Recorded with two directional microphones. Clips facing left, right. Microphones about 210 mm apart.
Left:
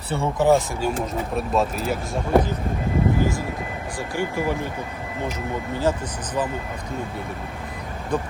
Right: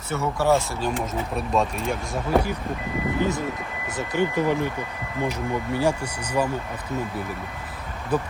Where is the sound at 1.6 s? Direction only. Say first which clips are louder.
Left 1 dB; centre (ahead or behind).